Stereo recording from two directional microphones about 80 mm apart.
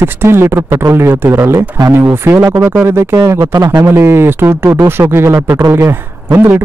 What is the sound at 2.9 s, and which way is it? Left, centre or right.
Speech, right.